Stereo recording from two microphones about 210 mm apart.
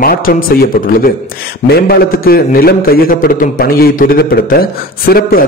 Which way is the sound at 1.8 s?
45° left (ahead or behind).